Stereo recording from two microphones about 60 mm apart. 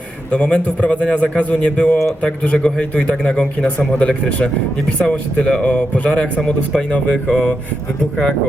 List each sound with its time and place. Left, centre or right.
0.3 s a man's voice: centre